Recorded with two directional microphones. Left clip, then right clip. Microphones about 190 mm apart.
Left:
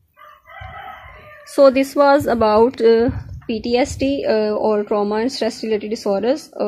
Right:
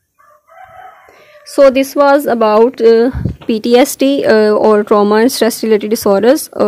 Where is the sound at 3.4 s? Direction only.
50° right (ahead or behind).